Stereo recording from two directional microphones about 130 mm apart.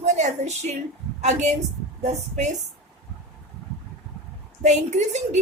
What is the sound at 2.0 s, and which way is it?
Speech, 60° right (ahead or behind).